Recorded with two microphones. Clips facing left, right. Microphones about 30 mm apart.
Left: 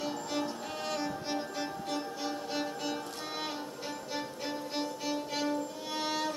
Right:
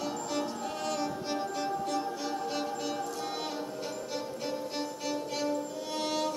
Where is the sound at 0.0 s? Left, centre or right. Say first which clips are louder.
Right 1 dB; centre.